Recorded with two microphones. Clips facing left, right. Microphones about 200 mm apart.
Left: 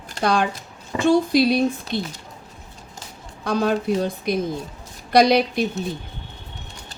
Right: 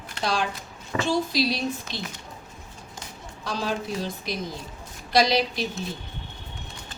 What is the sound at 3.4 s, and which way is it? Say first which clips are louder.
A woman's voice: left 8 dB; 55° left (ahead or behind).